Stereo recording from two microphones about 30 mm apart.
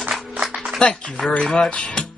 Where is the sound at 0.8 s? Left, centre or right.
Left.